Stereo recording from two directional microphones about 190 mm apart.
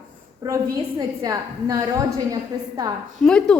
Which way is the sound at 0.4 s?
20° right (ahead or behind).